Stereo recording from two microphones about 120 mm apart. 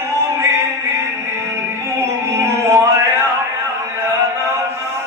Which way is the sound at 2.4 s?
25° right (ahead or behind).